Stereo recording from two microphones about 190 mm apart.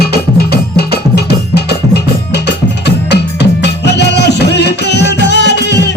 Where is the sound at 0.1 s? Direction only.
55° left (ahead or behind).